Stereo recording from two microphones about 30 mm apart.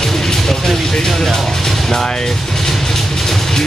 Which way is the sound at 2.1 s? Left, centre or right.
Centre.